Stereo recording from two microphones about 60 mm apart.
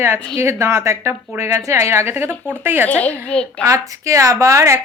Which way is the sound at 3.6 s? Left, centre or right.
Right.